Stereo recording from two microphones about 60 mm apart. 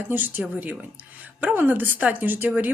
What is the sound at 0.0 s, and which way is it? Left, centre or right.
A woman's voice, right.